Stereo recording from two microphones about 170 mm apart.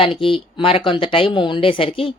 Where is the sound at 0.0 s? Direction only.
30° left (ahead or behind).